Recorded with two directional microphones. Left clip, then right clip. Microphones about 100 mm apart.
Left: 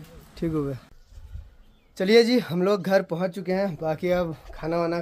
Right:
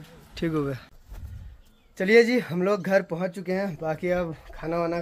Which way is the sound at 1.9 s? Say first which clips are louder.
Even; 30° left (ahead or behind).